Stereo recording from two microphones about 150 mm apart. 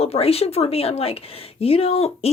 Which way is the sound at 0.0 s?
40° left (ahead or behind).